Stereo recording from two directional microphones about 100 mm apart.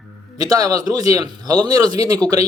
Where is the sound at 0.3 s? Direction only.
35° right (ahead or behind).